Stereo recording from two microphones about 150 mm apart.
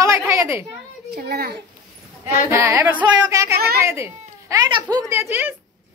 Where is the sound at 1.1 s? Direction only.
90° right.